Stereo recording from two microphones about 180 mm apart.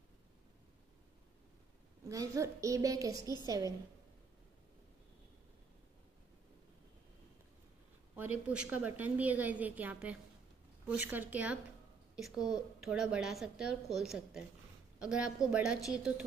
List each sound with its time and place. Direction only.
2.0 s a woman's voice: 15° right (ahead or behind)
8.2 s a woman's voice: 10° right (ahead or behind)